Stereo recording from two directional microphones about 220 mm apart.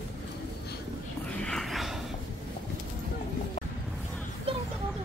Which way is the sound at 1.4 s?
Centre (ahead or behind).